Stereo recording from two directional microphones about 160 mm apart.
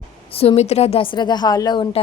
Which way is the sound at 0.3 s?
40° left (ahead or behind).